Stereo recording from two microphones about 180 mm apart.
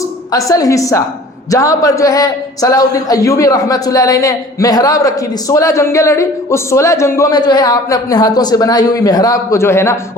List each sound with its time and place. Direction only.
0.3 s a woman's voice: 20° left (ahead or behind)